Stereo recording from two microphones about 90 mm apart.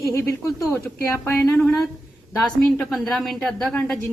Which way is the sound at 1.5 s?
5° left (ahead or behind).